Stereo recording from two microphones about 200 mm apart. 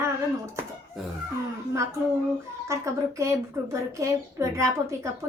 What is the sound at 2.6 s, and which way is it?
A woman's voice, 15° right (ahead or behind).